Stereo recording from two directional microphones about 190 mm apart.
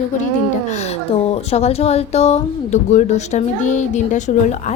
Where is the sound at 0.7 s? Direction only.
35° left (ahead or behind).